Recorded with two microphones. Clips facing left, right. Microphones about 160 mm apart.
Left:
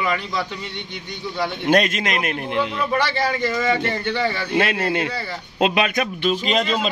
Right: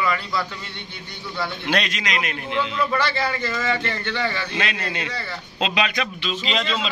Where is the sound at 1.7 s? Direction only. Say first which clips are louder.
Left 8 dB; 50° left (ahead or behind).